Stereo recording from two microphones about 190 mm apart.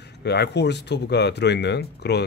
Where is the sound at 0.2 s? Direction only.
60° left (ahead or behind).